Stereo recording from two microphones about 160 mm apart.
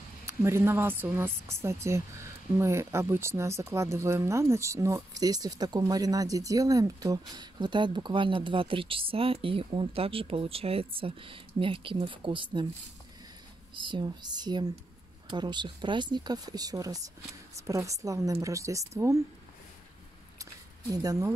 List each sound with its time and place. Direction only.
0.2 s a woman's voice: 15° right (ahead or behind)
13.7 s speech: 30° right (ahead or behind)
20.9 s speech: 20° right (ahead or behind)